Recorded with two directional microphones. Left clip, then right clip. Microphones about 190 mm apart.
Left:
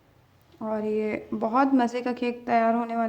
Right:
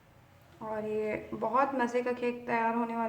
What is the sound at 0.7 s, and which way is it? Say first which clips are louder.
A woman's voice: left 6 dB; 50° left (ahead or behind).